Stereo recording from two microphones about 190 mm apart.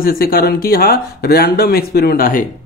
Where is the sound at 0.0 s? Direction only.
50° left (ahead or behind).